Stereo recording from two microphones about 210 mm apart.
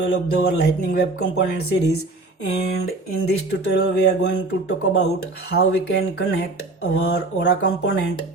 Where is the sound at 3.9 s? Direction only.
55° left (ahead or behind).